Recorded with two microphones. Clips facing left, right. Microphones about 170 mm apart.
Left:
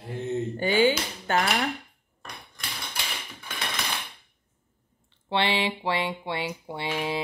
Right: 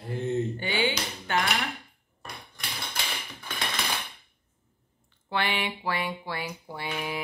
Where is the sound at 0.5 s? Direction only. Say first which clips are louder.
Left 6 dB; 45° left (ahead or behind).